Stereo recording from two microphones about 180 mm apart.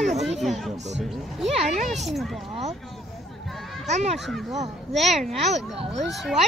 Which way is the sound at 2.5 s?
40° right (ahead or behind).